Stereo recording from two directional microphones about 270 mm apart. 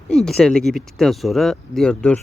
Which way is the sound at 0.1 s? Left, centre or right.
Centre.